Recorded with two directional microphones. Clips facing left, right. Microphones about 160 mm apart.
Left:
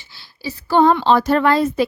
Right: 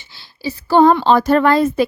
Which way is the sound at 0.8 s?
45° right (ahead or behind).